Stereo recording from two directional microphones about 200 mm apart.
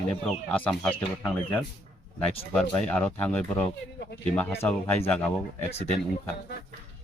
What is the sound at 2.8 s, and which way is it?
Speech, 5° left (ahead or behind).